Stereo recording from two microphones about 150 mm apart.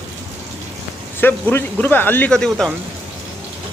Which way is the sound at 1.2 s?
15° left (ahead or behind).